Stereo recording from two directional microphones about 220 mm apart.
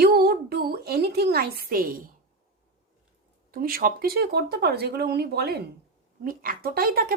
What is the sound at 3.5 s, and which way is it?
A woman's voice, 40° right (ahead or behind).